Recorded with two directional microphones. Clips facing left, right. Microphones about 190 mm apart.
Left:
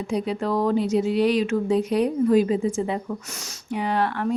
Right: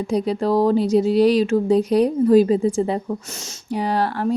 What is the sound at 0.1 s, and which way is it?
Speech, 35° right (ahead or behind).